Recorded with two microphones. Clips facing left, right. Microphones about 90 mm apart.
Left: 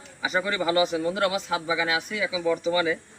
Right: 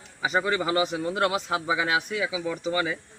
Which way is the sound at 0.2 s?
30° right (ahead or behind).